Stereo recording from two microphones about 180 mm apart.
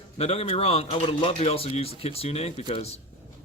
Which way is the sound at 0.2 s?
35° left (ahead or behind).